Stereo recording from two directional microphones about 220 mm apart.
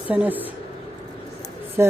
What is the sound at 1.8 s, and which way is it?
Speech, 10° right (ahead or behind).